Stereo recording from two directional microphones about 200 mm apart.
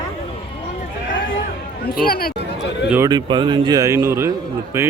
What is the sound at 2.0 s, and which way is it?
Speech, 50° left (ahead or behind).